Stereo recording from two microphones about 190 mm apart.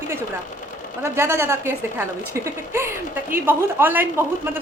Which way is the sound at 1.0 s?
15° right (ahead or behind).